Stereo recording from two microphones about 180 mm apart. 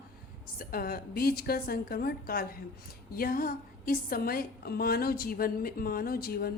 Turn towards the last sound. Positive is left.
turn(degrees=55)  # may be behind; listen again after turning